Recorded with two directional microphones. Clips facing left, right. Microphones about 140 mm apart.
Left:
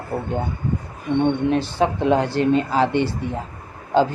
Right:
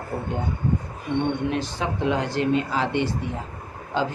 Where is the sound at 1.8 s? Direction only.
40° left (ahead or behind).